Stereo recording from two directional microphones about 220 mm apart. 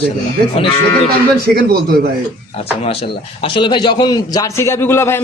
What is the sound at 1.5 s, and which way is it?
Speech, 45° right (ahead or behind).